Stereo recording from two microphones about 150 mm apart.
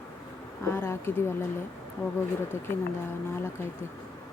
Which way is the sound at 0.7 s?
15° left (ahead or behind).